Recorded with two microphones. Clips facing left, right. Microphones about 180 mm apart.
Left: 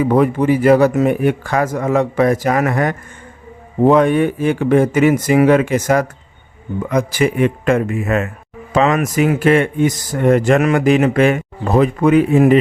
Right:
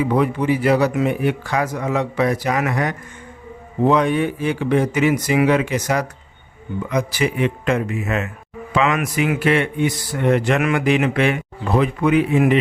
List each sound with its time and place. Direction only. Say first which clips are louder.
0.0 s speech: left 5 dB; 50° left (ahead or behind)
8.7 s speech: left 5 dB; 40° left (ahead or behind)